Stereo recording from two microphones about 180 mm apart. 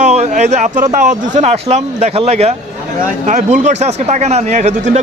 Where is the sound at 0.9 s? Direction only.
45° right (ahead or behind).